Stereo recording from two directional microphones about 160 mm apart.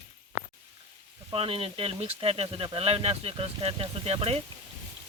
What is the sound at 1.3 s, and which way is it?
Speech, 35° right (ahead or behind).